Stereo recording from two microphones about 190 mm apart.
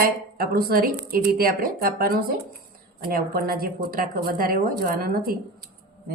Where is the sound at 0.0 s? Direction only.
55° right (ahead or behind).